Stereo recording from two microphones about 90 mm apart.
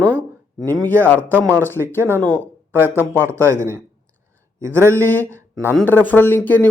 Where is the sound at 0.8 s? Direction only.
20° left (ahead or behind).